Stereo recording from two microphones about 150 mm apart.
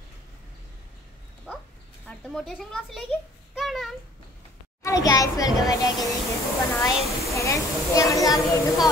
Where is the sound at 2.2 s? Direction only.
Centre (ahead or behind).